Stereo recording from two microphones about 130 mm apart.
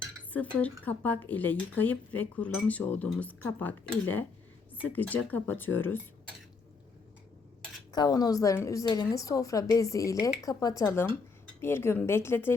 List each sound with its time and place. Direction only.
0.3 s speech: 10° left (ahead or behind)
7.9 s a woman's voice: 30° left (ahead or behind)